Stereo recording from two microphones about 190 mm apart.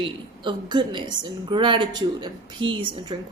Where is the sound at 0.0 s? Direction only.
25° right (ahead or behind).